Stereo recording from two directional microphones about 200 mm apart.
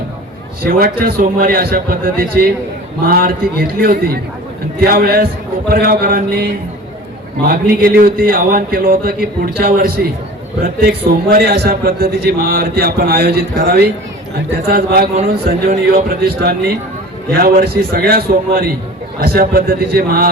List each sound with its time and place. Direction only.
0.6 s a man's voice: 50° right (ahead or behind)